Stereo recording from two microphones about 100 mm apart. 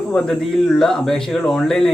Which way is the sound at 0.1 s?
5° left (ahead or behind).